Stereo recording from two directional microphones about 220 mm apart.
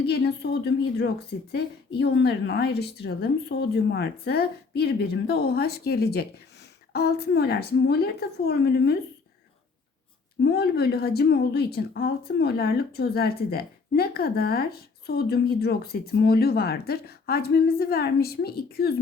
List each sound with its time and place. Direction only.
0.0 s a woman's voice: 50° left (ahead or behind)
10.4 s a woman's voice: 45° left (ahead or behind)